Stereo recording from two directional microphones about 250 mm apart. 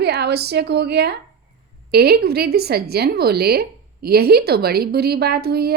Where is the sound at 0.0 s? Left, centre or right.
Right.